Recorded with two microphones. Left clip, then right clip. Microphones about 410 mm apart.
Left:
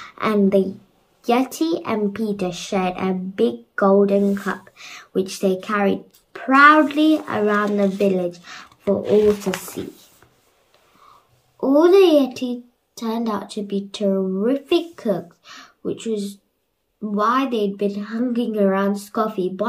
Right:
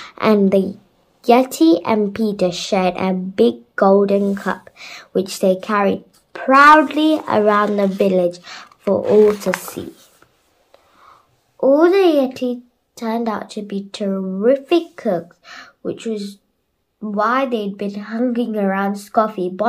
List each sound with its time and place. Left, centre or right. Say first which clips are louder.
0.0 s a woman's voice: right 4 dB; centre
11.6 s speech: right 1 dB; centre